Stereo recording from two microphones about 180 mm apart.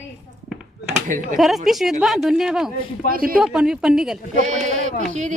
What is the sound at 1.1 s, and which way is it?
Speech, 45° right (ahead or behind).